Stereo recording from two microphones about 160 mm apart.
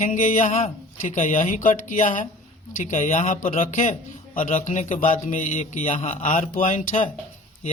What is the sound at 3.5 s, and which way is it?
A man's voice, 40° left (ahead or behind).